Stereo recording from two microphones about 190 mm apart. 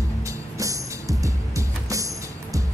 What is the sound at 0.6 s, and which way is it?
Music, 15° right (ahead or behind).